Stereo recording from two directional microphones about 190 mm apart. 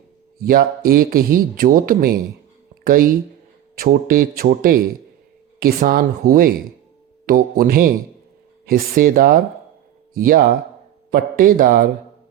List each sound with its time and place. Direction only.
0.4 s speech: 50° right (ahead or behind)